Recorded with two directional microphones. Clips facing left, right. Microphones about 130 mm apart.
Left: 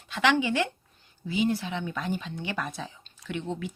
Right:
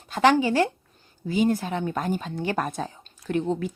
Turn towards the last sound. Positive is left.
turn(degrees=-40)  # may be behind; listen again after turning